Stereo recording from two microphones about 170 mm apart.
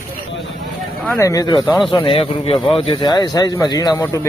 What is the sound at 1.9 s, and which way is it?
A man's voice, 30° left (ahead or behind).